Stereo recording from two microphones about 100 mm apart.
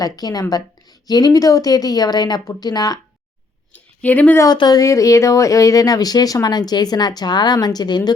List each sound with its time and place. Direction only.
0.0 s speech: 40° left (ahead or behind)
3.7 s a sound: 15° left (ahead or behind)
4.4 s speech: 45° left (ahead or behind)
4.8 s speech: 35° left (ahead or behind)